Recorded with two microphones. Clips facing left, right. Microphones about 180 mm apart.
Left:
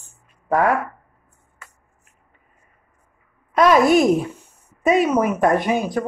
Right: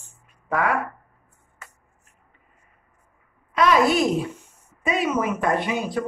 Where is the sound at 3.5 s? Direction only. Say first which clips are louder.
Left 5 dB; 45° left (ahead or behind).